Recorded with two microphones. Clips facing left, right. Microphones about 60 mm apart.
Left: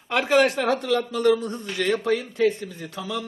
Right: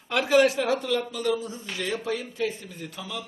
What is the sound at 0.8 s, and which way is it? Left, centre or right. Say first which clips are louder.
Speech: left 5 dB; left.